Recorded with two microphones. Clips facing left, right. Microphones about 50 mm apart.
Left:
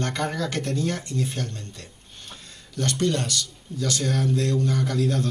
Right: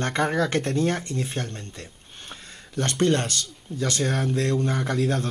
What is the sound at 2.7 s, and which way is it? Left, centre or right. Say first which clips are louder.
Speech: right 2 dB; right.